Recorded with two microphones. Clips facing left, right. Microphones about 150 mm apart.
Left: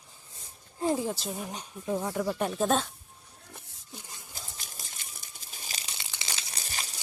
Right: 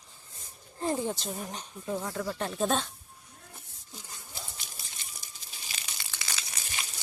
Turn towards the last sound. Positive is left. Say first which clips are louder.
# left 1 dB
turn(degrees=35)  # may be behind; listen again after turning